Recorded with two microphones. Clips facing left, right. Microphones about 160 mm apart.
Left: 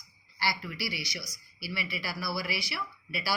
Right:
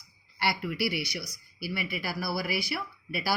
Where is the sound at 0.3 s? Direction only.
60° right (ahead or behind).